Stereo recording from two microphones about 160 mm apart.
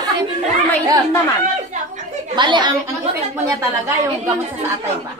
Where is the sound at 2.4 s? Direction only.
30° right (ahead or behind).